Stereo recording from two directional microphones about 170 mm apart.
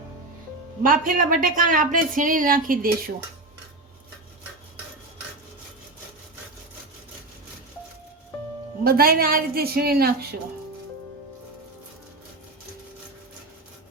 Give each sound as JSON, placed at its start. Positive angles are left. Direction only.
{"t": 0.8, "sound": "speech", "side_deg": -55}
{"t": 8.8, "sound": "a woman's voice", "side_deg": -60}